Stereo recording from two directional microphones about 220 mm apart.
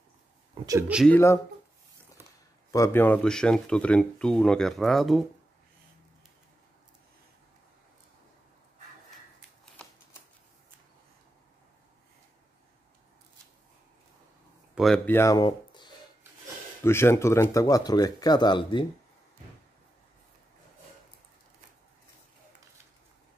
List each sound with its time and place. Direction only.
0.7 s speech: 10° right (ahead or behind)
1.1 s speech: 10° left (ahead or behind)
2.7 s speech: 10° left (ahead or behind)
14.8 s speech: 5° left (ahead or behind); by 18.9 s 20° left (ahead or behind)